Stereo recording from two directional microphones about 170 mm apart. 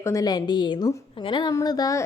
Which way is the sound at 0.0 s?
20° left (ahead or behind).